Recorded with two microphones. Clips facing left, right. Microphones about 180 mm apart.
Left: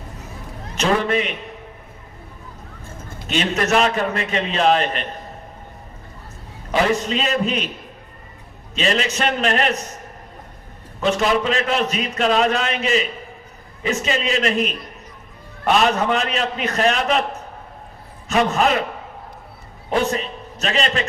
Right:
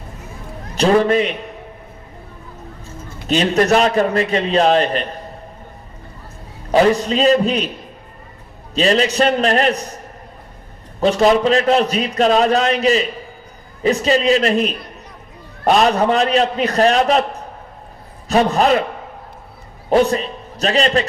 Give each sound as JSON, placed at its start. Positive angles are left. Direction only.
{"t": 0.8, "sound": "a man's voice", "side_deg": -35}
{"t": 3.2, "sound": "a man's voice", "side_deg": -35}
{"t": 6.7, "sound": "a man's voice", "side_deg": -35}
{"t": 8.7, "sound": "a man's voice", "side_deg": -35}
{"t": 11.0, "sound": "a man's voice", "side_deg": -35}
{"t": 18.3, "sound": "a man's voice", "side_deg": -35}
{"t": 19.9, "sound": "a man's voice", "side_deg": -35}